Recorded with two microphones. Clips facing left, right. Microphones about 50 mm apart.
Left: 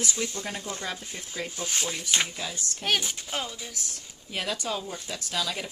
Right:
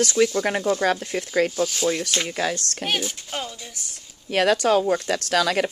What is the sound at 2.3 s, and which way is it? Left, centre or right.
Speech, right.